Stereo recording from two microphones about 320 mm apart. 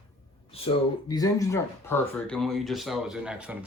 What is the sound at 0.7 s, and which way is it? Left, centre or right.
Speech, centre.